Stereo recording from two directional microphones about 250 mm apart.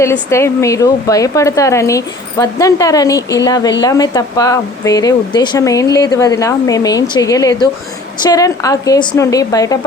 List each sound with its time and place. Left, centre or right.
0.0 s speech: centre